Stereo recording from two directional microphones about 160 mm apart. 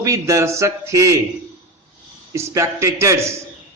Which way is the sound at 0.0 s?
20° right (ahead or behind).